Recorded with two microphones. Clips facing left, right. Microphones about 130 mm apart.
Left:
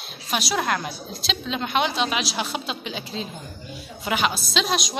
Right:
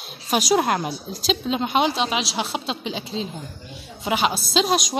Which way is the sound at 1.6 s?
30° right (ahead or behind).